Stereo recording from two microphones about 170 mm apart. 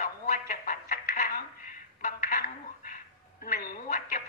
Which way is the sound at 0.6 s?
50° left (ahead or behind).